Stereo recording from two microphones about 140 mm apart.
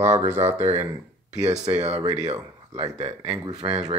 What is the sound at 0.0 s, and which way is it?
Speech, 50° right (ahead or behind).